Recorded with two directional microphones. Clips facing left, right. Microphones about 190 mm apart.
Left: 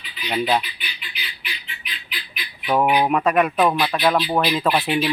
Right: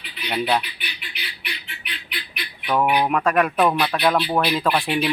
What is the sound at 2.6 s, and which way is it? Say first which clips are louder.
Speech: left 2 dB; 15° left (ahead or behind).